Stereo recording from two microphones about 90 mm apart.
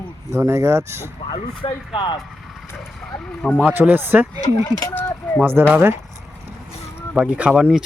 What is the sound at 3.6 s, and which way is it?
Speech, 20° right (ahead or behind).